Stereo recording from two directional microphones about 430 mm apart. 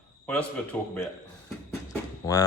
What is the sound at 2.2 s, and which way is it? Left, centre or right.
Speech, centre.